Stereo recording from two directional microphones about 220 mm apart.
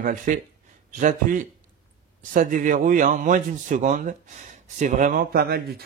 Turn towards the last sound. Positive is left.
turn(degrees=-45)  # may be behind; listen again after turning